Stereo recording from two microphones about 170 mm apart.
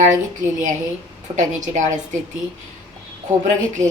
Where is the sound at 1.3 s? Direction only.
45° right (ahead or behind).